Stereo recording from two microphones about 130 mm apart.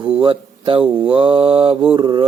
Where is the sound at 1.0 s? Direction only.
45° right (ahead or behind).